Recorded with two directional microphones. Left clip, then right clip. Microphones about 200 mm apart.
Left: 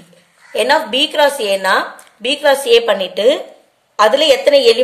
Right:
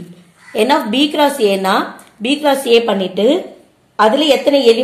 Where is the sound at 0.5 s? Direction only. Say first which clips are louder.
Even; 20° left (ahead or behind).